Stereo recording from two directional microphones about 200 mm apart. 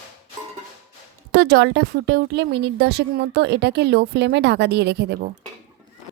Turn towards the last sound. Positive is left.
turn(degrees=-55)  # may be behind; listen again after turning